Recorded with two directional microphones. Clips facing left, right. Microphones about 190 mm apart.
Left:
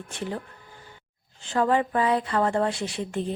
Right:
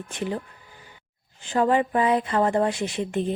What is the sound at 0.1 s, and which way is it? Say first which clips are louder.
Speech: right 3 dB; 15° right (ahead or behind).